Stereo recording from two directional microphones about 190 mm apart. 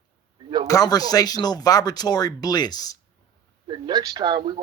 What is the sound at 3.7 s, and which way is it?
Speech, 25° right (ahead or behind).